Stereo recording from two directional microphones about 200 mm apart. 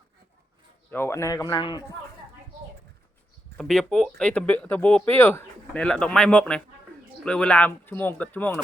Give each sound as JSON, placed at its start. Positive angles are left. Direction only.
{"t": 0.9, "sound": "speech", "side_deg": 10}
{"t": 3.6, "sound": "speech", "side_deg": 0}